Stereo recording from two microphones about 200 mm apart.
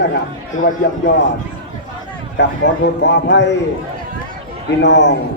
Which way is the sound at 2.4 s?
60° left (ahead or behind).